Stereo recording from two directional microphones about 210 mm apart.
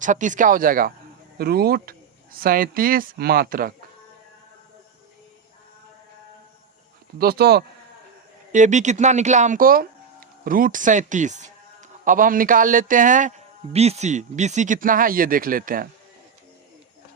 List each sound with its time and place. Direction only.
0.0 s speech: 35° right (ahead or behind)
7.2 s speech: 45° right (ahead or behind)
8.5 s speech: 35° right (ahead or behind)